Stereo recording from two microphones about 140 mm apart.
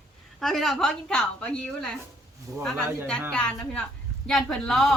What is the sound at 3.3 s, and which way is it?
A woman's voice, 5° left (ahead or behind).